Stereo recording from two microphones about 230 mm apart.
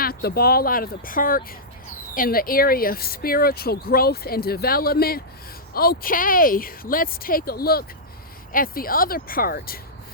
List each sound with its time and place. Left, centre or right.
0.0 s speech: left